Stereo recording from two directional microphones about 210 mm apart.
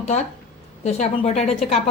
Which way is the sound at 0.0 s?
30° left (ahead or behind).